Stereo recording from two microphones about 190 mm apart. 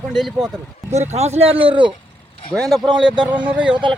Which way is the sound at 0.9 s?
35° right (ahead or behind).